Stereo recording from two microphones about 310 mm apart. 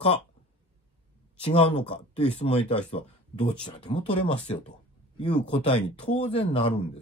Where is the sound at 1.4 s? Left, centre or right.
Centre.